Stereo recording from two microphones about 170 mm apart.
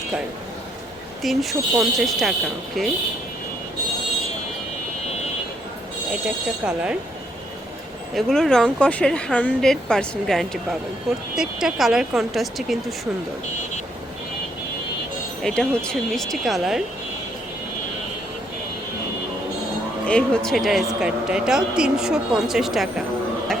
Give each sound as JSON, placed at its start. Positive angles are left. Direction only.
{"t": 1.2, "sound": "speech", "side_deg": 0}
{"t": 6.2, "sound": "speech", "side_deg": -5}
{"t": 8.1, "sound": "speech", "side_deg": 0}
{"t": 15.4, "sound": "speech", "side_deg": 5}
{"t": 20.1, "sound": "speech", "side_deg": 5}
{"t": 23.5, "sound": "a sound", "side_deg": 5}